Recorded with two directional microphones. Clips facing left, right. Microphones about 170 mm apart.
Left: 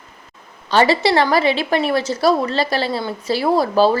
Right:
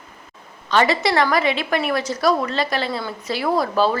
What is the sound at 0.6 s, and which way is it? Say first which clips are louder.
A woman's voice: left 3 dB; 30° left (ahead or behind).